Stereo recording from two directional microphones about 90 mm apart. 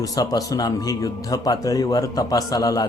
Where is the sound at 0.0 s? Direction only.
45° left (ahead or behind).